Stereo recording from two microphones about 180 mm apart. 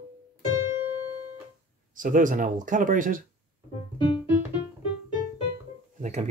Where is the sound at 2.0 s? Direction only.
45° right (ahead or behind).